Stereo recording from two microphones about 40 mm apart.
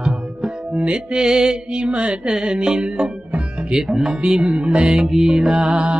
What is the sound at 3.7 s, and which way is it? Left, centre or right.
Speech, centre.